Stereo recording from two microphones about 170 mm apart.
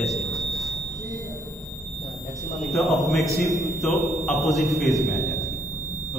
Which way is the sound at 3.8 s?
Centre (ahead or behind).